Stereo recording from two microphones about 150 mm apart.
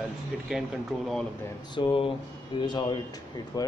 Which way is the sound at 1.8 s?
35° left (ahead or behind).